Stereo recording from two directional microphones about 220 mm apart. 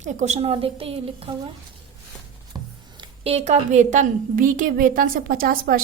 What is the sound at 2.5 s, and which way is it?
A woman's voice, 25° right (ahead or behind).